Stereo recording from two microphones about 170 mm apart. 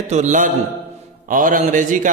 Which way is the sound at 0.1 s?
45° right (ahead or behind).